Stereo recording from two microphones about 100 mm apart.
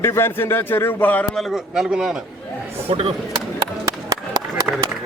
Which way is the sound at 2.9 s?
75° right (ahead or behind).